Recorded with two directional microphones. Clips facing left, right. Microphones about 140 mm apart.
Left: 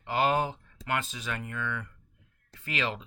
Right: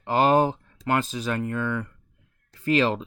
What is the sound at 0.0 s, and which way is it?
Speech, 35° right (ahead or behind).